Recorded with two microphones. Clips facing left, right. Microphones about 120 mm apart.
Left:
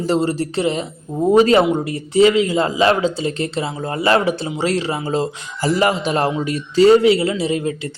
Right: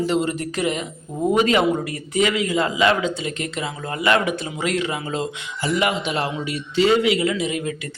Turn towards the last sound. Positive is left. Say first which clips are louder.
# left 5 dB
turn(degrees=30)  # may be behind; listen again after turning